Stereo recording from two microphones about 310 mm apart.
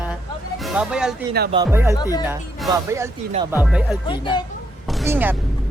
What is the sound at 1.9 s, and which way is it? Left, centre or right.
Speech, centre.